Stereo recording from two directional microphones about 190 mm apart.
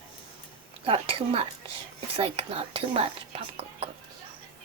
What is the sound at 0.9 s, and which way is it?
Speech, 30° right (ahead or behind).